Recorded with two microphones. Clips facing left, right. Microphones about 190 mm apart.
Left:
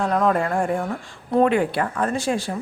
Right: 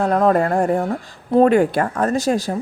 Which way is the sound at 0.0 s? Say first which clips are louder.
Right 4 dB; 40° right (ahead or behind).